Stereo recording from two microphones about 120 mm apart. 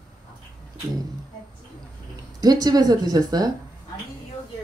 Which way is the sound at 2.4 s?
30° right (ahead or behind).